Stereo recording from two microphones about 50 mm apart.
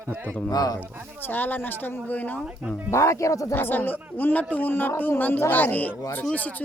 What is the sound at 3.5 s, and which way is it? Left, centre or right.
A man's voice, left.